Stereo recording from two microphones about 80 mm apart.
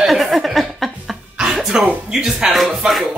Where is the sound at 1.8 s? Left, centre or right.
Centre.